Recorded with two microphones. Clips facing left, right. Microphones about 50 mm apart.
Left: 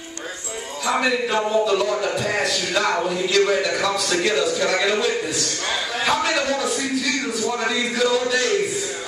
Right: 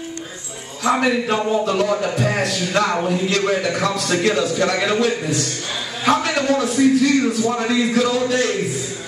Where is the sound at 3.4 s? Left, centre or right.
Right.